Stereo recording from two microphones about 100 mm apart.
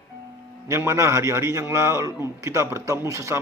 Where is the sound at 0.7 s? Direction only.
30° right (ahead or behind).